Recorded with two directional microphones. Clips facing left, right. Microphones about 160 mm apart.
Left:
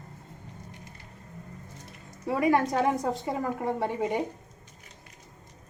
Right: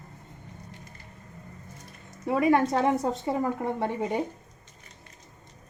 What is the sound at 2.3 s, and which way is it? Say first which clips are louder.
A woman's voice: right 2 dB; 25° right (ahead or behind).